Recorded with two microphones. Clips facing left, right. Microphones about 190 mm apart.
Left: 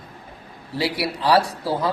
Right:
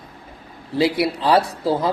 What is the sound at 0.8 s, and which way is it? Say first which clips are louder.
A woman's voice: right 5 dB; 20° right (ahead or behind).